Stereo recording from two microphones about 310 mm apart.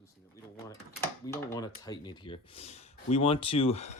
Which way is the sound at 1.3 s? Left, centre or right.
Centre.